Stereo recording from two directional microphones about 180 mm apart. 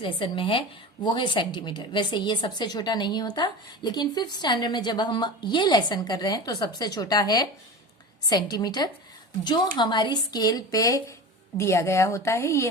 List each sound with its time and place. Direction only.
0.0 s a woman's voice: 30° left (ahead or behind)